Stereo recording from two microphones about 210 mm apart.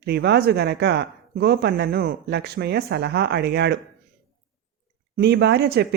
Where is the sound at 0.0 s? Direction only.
50° right (ahead or behind).